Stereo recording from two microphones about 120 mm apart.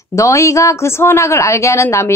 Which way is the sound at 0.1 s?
25° left (ahead or behind).